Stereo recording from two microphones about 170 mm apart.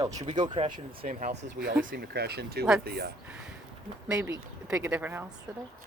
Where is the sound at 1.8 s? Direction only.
65° right (ahead or behind).